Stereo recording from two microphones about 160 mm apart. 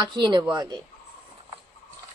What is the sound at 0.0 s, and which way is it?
Speech, 30° right (ahead or behind).